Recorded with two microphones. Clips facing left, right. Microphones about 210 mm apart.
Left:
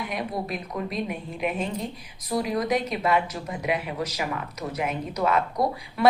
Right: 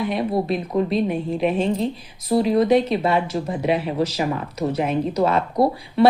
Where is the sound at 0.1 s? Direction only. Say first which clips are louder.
Right 8 dB; 30° right (ahead or behind).